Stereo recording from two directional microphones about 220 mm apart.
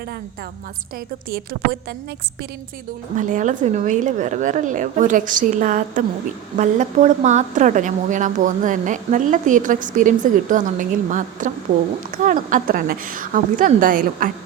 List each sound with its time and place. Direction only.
3.2 s a woman's voice: 35° right (ahead or behind)